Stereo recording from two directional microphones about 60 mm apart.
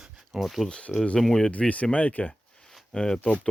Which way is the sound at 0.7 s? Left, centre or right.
Centre.